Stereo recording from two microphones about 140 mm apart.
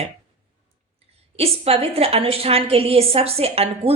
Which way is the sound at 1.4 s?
45° right (ahead or behind).